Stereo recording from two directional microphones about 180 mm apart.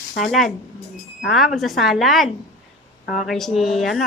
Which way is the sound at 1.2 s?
Centre (ahead or behind).